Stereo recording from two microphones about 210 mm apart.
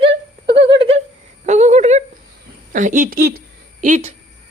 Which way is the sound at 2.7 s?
40° right (ahead or behind).